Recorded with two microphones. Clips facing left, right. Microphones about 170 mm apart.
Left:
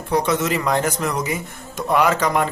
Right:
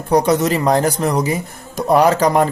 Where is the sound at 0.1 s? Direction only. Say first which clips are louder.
Right 5 dB; 40° right (ahead or behind).